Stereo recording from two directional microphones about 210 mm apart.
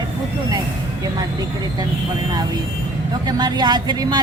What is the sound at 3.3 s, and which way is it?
Speech, 20° right (ahead or behind).